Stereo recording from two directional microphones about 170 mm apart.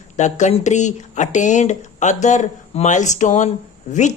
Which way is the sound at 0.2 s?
45° left (ahead or behind).